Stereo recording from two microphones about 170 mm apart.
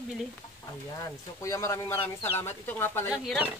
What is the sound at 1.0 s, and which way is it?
Speech, 20° left (ahead or behind).